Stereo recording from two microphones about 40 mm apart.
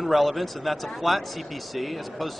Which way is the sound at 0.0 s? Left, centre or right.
Centre.